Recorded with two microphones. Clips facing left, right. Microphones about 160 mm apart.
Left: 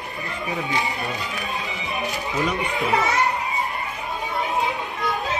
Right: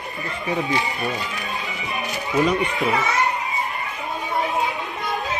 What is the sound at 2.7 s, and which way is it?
Speech, centre (ahead or behind).